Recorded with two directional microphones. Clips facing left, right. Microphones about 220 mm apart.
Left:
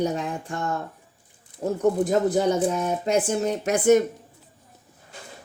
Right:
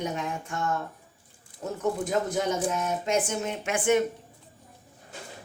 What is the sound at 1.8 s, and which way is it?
A woman's voice, 35° left (ahead or behind).